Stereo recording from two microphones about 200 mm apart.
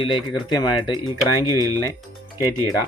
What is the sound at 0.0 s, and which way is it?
Speech, 25° left (ahead or behind).